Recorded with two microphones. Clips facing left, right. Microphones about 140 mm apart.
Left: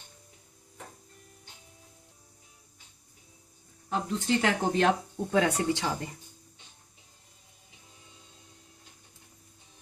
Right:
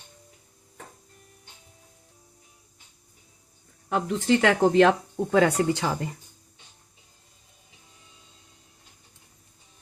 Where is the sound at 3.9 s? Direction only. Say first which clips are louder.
Right 6 dB; 65° right (ahead or behind); by 5.5 s 90° right.